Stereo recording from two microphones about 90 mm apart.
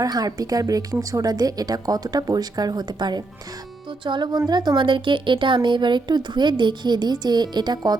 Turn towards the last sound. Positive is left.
turn(degrees=-50)  # may be behind; listen again after turning